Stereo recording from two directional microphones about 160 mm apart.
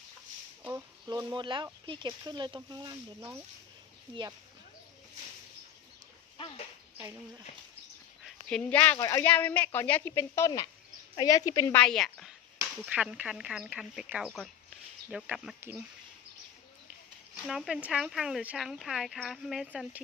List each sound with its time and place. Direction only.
0.7 s speech: 20° right (ahead or behind)
6.3 s a sound: 35° left (ahead or behind)
8.2 s a sound: 5° left (ahead or behind)
9.0 s a woman's voice: 20° left (ahead or behind)
11.8 s speech: 5° left (ahead or behind)
12.9 s speech: 10° right (ahead or behind)
17.7 s speech: 5° right (ahead or behind)